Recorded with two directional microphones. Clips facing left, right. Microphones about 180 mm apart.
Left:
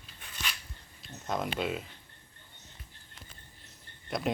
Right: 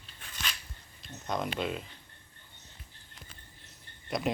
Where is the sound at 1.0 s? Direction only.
Centre (ahead or behind).